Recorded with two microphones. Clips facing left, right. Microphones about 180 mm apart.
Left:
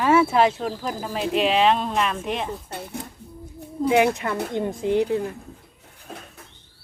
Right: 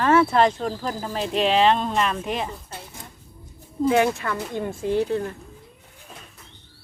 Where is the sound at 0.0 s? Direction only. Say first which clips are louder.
Even; 10° left (ahead or behind).